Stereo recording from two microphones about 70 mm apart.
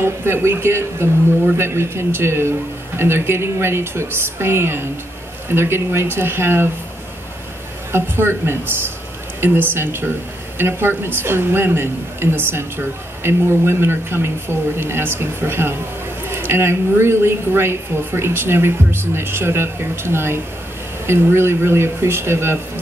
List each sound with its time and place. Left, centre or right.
0.0 s speech: right
7.9 s speech: right